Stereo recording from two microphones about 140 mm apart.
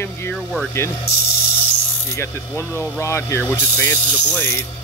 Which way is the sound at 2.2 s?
15° left (ahead or behind).